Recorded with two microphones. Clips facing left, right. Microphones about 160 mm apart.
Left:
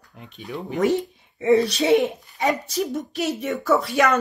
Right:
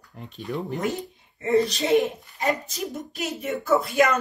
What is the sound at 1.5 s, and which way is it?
Speech, 75° left (ahead or behind).